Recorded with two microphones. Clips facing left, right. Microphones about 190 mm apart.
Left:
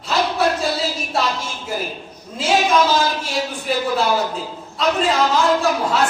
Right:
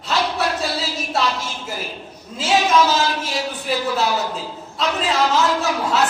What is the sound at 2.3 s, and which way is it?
A woman's voice, centre (ahead or behind).